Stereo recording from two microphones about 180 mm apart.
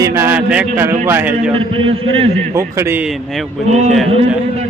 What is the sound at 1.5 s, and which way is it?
Speech, 30° right (ahead or behind).